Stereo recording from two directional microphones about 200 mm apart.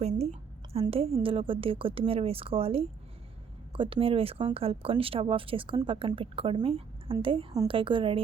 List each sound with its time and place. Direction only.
0.0 s a woman's voice: 30° right (ahead or behind)